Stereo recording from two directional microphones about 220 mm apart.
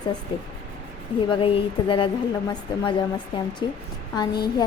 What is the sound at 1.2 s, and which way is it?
Speech, 25° left (ahead or behind).